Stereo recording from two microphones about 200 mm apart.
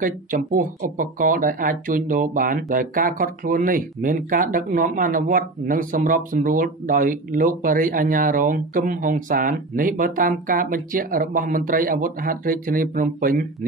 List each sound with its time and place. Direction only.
0.0 s speech: 40° right (ahead or behind)